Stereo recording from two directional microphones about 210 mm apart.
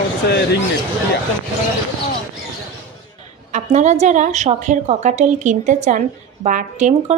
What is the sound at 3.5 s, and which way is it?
A woman's voice, 35° right (ahead or behind).